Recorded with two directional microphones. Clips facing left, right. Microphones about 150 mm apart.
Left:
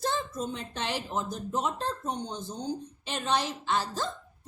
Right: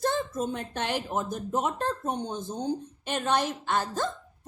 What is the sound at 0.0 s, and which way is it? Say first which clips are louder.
Speech: right 3 dB; 50° right (ahead or behind).